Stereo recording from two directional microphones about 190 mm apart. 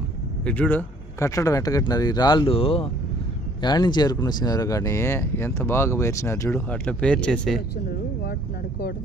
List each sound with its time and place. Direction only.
0.5 s speech: 10° left (ahead or behind)